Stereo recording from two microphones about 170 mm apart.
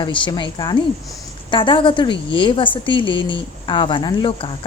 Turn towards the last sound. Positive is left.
turn(degrees=30)  # may be behind; listen again after turning